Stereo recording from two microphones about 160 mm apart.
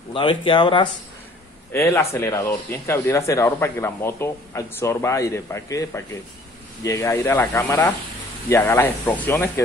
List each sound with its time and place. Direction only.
0.1 s speech: 30° left (ahead or behind)
1.7 s speech: 15° left (ahead or behind)